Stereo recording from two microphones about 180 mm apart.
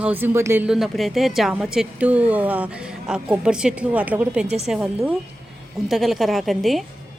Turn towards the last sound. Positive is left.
turn(degrees=0)  # may be behind; listen again after turning